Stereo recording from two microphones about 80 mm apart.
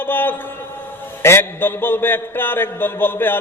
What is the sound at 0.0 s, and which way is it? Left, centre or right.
A man's voice, left.